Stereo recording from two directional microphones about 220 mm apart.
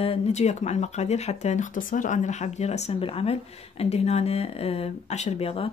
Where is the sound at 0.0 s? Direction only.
30° left (ahead or behind).